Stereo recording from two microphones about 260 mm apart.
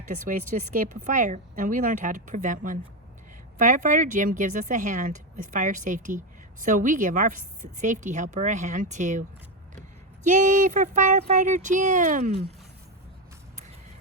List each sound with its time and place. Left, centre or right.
0.1 s speech: right
10.2 s speech: right